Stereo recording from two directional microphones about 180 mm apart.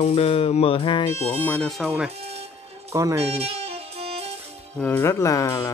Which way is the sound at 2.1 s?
35° right (ahead or behind).